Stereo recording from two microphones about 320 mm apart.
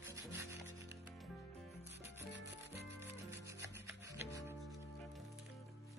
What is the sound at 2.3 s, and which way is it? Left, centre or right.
Rub, right.